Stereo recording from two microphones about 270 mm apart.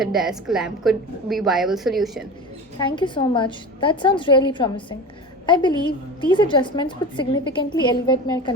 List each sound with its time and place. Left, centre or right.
0.0 s a woman's voice: centre
2.7 s a woman's voice: centre